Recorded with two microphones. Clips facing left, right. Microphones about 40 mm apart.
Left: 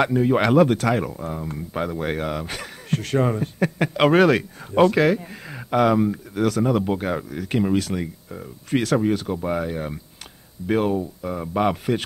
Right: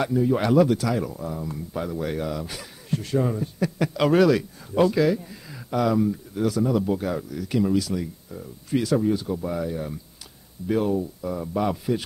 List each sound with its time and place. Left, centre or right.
0.0 s speech: left